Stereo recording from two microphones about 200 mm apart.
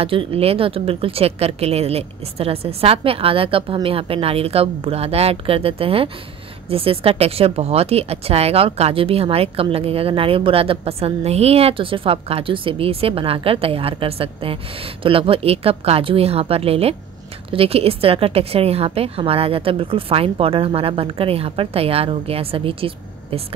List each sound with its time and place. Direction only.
0.0 s speech: 25° right (ahead or behind)